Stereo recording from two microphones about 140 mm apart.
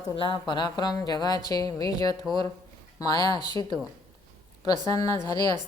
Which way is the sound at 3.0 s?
30° left (ahead or behind).